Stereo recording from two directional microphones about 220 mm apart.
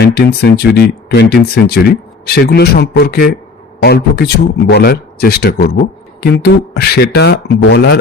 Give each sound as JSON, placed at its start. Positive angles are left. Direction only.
{"t": 0.0, "sound": "speech", "side_deg": 45}